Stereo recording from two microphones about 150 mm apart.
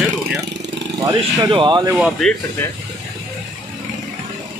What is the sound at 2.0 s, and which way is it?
Speech, centre (ahead or behind).